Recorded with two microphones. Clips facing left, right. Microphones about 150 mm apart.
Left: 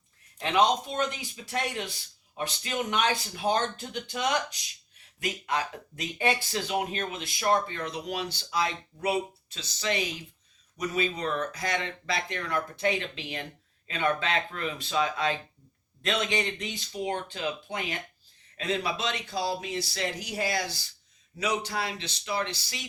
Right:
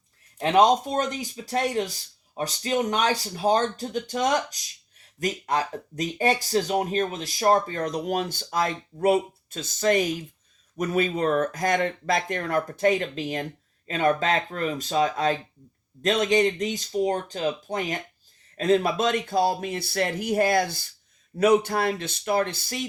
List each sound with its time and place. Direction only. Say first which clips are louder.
0.3 s speech: right 6 dB; 40° right (ahead or behind)